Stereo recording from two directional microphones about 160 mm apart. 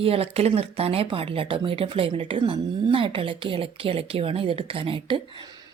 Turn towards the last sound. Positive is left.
turn(degrees=-35)  # may be behind; listen again after turning